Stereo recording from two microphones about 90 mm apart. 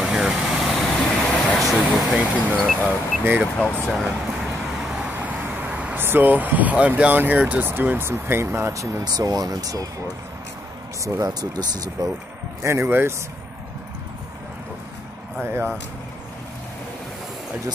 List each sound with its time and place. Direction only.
0.0 s vehicle: 10° right (ahead or behind)
2.8 s speech: 15° right (ahead or behind)
3.5 s speech: 10° left (ahead or behind)
3.9 s vehicle: 5° right (ahead or behind)
5.1 s speech: 20° right (ahead or behind)
9.0 s speech: 45° right (ahead or behind)
11.1 s speech: 45° right (ahead or behind)
12.6 s speech: 25° right (ahead or behind)